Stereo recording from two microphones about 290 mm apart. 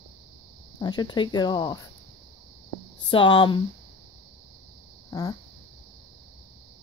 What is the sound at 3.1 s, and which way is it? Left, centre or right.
Speech, centre.